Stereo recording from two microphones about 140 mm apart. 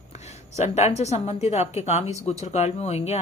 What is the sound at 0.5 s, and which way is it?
Speech, 50° left (ahead or behind).